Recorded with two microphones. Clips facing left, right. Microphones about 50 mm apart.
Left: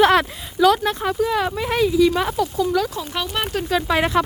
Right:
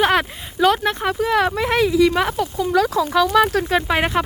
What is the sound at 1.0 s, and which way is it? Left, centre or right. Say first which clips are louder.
Speech: right 4 dB; right.